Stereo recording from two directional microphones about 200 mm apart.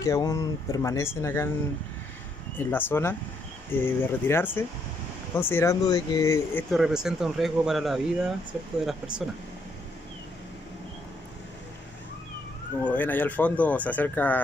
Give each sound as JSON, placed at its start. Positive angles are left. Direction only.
{"t": 0.0, "sound": "speech", "side_deg": 15}
{"t": 2.5, "sound": "speech", "side_deg": 10}
{"t": 6.7, "sound": "speech", "side_deg": 0}
{"t": 12.8, "sound": "speech", "side_deg": 10}